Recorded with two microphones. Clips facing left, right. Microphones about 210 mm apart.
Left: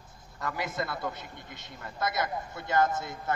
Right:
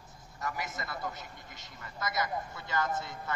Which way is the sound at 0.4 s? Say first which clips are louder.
Left 5 dB; 60° left (ahead or behind).